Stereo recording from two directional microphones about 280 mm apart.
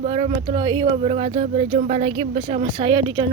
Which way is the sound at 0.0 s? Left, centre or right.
Right.